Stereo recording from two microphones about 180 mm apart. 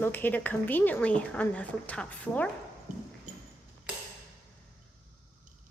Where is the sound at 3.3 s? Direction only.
45° right (ahead or behind).